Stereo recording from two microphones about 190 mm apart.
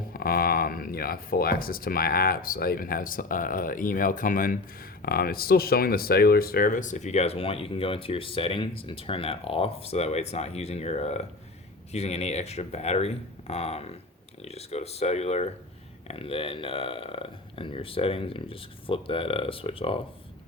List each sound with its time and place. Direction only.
0.1 s speech: 50° left (ahead or behind); by 20.0 s 30° left (ahead or behind)